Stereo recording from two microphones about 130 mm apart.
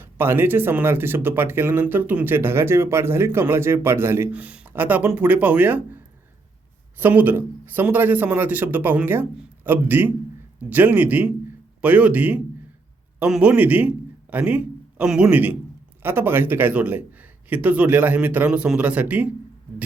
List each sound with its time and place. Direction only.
0.0 s speech: 15° right (ahead or behind)
7.0 s a man's voice: 15° right (ahead or behind)